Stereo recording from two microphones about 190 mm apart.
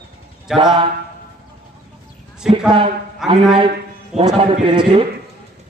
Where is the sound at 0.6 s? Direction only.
25° right (ahead or behind).